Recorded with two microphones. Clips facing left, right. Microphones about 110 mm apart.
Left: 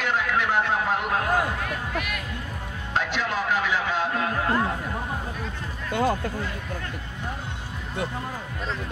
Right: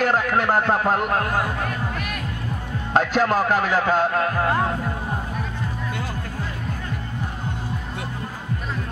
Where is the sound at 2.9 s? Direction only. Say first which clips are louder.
Right 8 dB; 45° right (ahead or behind).